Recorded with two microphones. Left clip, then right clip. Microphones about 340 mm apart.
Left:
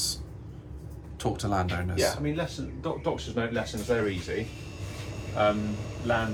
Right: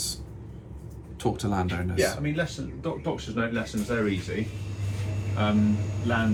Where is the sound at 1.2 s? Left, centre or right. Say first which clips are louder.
Even; centre.